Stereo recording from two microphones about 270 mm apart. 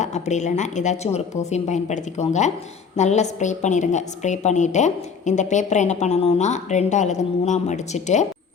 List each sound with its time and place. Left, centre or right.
0.0 s a woman's voice: left